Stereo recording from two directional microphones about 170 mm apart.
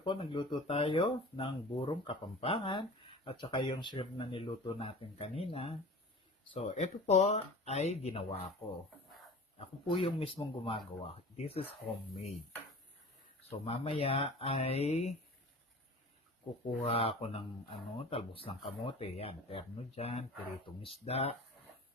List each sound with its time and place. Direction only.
0.0 s speech: 30° left (ahead or behind)
9.6 s speech: 30° left (ahead or behind)
13.4 s speech: 35° left (ahead or behind)
16.8 s speech: 35° left (ahead or behind)